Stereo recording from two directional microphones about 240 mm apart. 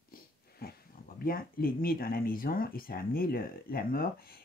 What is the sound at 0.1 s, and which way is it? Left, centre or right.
Speech, left.